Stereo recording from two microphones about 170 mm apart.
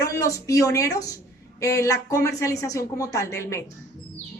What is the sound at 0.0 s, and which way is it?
Speech, 20° left (ahead or behind).